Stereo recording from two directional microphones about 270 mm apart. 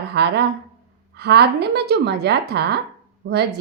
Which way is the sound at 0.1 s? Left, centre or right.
Right.